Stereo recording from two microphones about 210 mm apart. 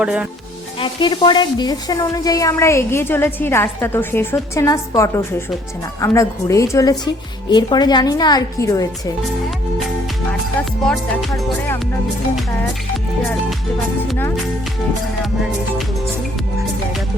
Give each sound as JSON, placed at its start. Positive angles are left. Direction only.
{"t": 0.0, "sound": "music", "side_deg": -5}
{"t": 0.8, "sound": "a woman's voice", "side_deg": 25}
{"t": 10.8, "sound": "music", "side_deg": 5}